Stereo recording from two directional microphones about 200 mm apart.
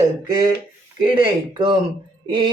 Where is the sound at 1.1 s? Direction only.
25° right (ahead or behind).